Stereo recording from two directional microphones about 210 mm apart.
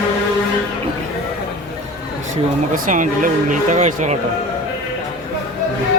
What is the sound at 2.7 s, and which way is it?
Speech, 40° right (ahead or behind).